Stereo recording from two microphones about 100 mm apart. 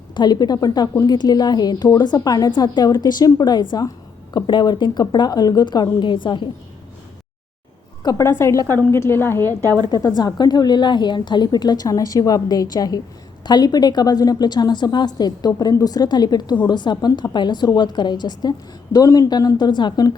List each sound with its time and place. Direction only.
0.1 s a woman's voice: 45° left (ahead or behind)
8.0 s a woman's voice: 30° left (ahead or behind)
10.1 s a woman's voice: 45° left (ahead or behind)
18.9 s a woman's voice: 35° left (ahead or behind)